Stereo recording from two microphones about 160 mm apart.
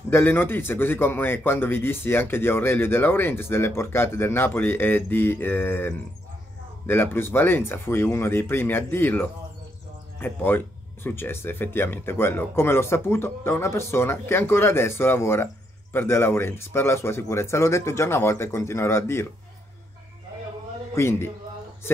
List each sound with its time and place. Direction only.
0.1 s speech: 15° left (ahead or behind)
20.9 s speech: 15° left (ahead or behind)